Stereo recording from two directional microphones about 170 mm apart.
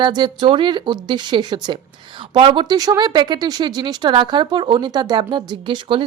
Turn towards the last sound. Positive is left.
turn(degrees=-30)  # may be behind; listen again after turning